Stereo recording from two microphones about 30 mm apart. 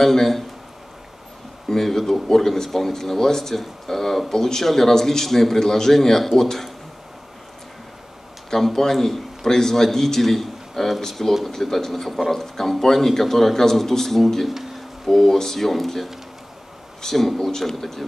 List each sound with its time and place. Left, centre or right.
0.0 s speech: centre
1.7 s speech: centre
8.5 s speech: centre
17.0 s speech: centre